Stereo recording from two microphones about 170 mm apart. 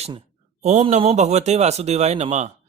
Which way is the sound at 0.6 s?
40° right (ahead or behind).